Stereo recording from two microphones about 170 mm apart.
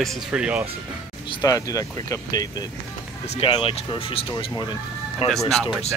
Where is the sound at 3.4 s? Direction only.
30° left (ahead or behind).